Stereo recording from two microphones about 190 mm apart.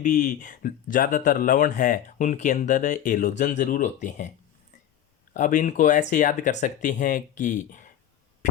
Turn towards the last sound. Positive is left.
turn(degrees=40)  # may be behind; listen again after turning